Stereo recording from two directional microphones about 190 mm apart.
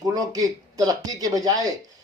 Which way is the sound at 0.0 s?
20° right (ahead or behind).